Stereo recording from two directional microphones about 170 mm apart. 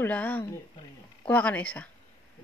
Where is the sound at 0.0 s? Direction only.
10° left (ahead or behind).